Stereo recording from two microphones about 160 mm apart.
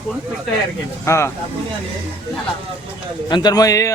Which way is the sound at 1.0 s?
15° left (ahead or behind).